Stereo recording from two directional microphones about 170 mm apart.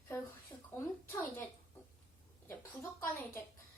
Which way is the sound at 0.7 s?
15° left (ahead or behind).